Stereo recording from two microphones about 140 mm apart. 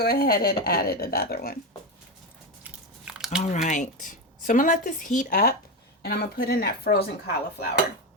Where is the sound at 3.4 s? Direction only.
60° left (ahead or behind); by 6.9 s 90° left.